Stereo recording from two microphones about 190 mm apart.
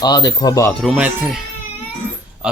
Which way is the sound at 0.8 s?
5° right (ahead or behind).